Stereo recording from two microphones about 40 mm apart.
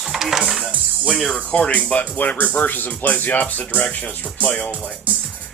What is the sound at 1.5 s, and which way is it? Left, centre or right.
Speech, left.